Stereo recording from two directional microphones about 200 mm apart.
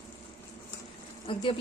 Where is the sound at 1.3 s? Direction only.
25° left (ahead or behind).